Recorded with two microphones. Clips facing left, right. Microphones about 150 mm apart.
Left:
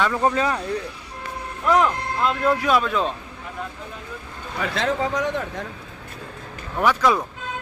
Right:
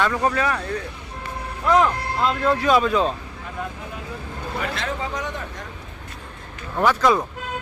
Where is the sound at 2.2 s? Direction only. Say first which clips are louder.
Right 1 dB; 10° left (ahead or behind).